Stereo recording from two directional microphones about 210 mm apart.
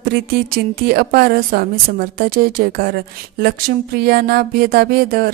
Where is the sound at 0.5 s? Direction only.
45° right (ahead or behind).